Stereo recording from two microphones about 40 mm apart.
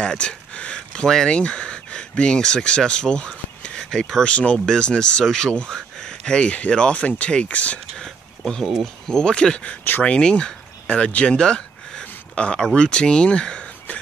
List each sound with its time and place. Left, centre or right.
0.2 s a sound: left
1.0 s speech: centre
1.3 s speech: left
7.4 s speech: left
8.0 s a sound: centre
8.8 s speech: centre
9.3 s speech: left
10.9 s speech: left
11.3 s a sound: left
12.5 s speech: centre